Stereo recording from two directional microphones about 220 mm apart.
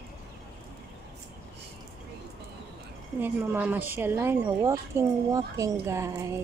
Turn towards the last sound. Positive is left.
turn(degrees=-15)  # may be behind; listen again after turning